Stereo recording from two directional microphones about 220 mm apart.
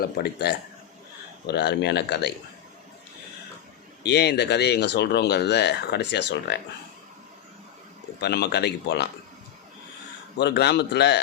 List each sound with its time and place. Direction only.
0.0 s speech: 45° left (ahead or behind)
4.0 s speech: 50° left (ahead or behind)
8.2 s speech: 50° left (ahead or behind)
10.3 s speech: 50° left (ahead or behind)